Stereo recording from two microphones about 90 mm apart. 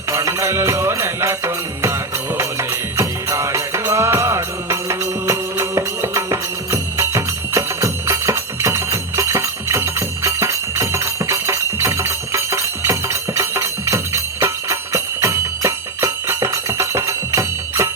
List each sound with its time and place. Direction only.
0.1 s music: 30° right (ahead or behind)